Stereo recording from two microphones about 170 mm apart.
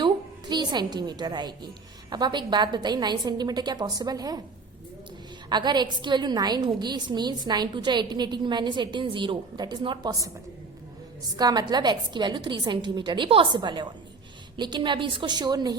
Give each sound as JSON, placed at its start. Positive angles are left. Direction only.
{"t": 0.0, "sound": "a woman's voice", "side_deg": -25}
{"t": 5.5, "sound": "a woman's voice", "side_deg": -25}
{"t": 11.3, "sound": "a woman's voice", "side_deg": -25}